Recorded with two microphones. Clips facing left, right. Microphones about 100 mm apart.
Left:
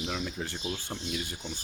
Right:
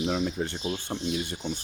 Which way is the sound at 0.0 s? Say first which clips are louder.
Right 7 dB; 30° right (ahead or behind).